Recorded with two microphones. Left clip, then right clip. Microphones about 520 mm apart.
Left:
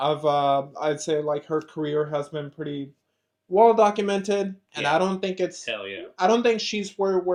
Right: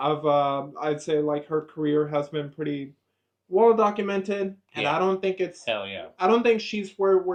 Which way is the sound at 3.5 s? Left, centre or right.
Left.